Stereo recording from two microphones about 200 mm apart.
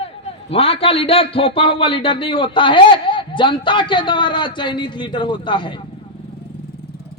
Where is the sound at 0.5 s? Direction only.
30° left (ahead or behind).